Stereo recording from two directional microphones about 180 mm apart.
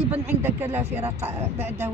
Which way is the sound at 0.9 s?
35° right (ahead or behind).